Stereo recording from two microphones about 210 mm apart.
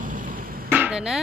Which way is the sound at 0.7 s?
5° right (ahead or behind).